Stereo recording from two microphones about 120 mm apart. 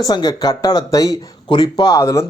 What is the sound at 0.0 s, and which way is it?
Speech, 30° left (ahead or behind).